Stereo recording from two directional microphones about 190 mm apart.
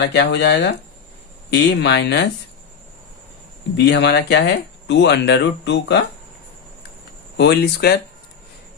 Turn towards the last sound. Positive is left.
turn(degrees=55)  # may be behind; listen again after turning